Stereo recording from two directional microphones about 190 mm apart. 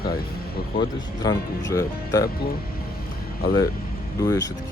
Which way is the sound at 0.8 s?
20° left (ahead or behind).